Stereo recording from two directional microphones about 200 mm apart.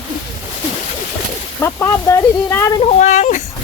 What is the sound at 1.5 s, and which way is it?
Speech, 15° left (ahead or behind).